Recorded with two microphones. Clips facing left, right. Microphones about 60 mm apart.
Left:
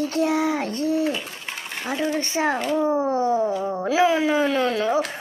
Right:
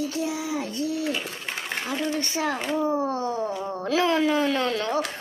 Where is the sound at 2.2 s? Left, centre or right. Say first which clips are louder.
Left 4 dB; left.